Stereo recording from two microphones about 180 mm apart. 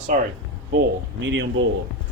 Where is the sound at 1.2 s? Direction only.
90° right.